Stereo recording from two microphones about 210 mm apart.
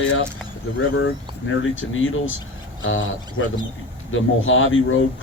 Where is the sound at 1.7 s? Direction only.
70° left (ahead or behind).